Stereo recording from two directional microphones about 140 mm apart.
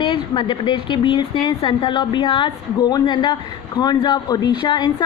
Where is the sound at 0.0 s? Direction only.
35° left (ahead or behind).